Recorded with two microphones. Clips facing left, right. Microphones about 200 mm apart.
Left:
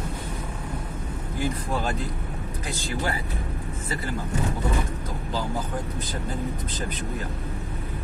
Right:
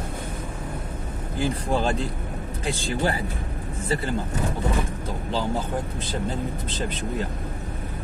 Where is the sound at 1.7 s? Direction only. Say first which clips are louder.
Right 4 dB; 30° right (ahead or behind).